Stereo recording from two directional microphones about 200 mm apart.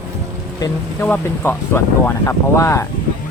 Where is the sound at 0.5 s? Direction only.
15° left (ahead or behind).